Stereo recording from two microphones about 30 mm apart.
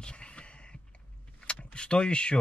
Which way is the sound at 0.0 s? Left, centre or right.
Left.